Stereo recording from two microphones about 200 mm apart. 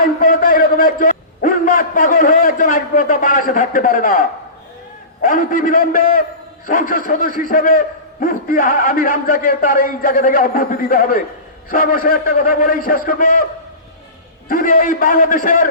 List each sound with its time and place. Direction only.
0.0 s a man's voice: 45° left (ahead or behind)